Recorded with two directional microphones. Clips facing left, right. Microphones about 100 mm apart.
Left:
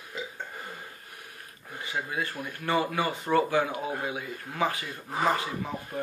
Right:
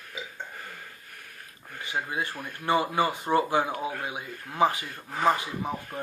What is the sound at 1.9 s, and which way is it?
Speech, 25° right (ahead or behind).